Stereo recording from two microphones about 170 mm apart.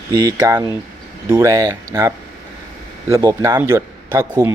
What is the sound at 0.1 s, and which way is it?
A man's voice, 25° right (ahead or behind).